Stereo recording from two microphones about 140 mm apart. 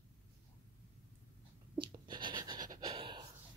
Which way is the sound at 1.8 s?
35° right (ahead or behind).